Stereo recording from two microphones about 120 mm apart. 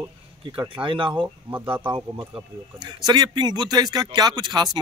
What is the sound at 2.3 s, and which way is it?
Speech, 35° right (ahead or behind).